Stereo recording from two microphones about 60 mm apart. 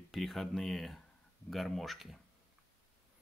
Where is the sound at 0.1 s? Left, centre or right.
Centre.